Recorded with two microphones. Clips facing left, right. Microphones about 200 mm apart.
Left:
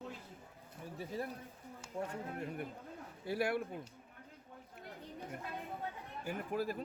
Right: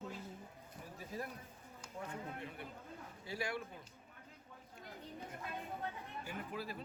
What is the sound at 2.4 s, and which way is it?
Speech, 50° left (ahead or behind).